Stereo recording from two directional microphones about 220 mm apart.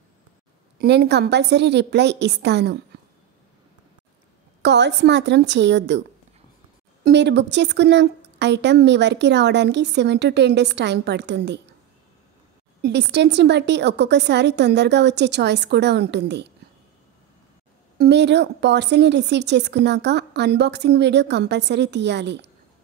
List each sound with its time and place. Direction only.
0.7 s a woman's voice: 50° right (ahead or behind)
4.6 s a woman's voice: 50° right (ahead or behind)
7.1 s a woman's voice: 50° right (ahead or behind)
12.8 s a woman's voice: 50° right (ahead or behind)
17.9 s a woman's voice: 50° right (ahead or behind)